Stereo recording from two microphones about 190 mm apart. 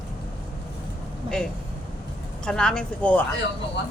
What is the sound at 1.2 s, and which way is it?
Speech, 25° right (ahead or behind).